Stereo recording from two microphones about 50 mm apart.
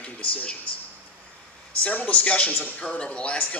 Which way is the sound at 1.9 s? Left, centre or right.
Left.